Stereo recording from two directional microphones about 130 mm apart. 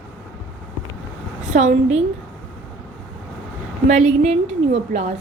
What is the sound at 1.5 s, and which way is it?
Speech, 65° right (ahead or behind).